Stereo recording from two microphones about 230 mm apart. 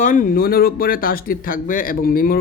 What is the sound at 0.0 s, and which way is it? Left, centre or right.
Speech, left.